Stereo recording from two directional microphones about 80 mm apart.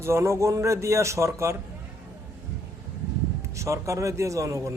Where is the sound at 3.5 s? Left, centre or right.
Right.